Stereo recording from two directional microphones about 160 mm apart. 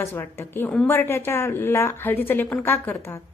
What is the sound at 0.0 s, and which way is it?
A woman's voice, 15° left (ahead or behind).